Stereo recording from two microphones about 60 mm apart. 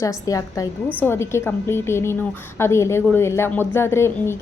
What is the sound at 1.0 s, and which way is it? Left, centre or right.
A woman's voice, left.